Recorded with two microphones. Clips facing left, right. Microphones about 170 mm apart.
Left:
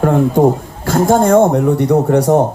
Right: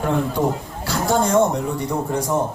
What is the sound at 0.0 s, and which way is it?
A man's voice, 50° left (ahead or behind).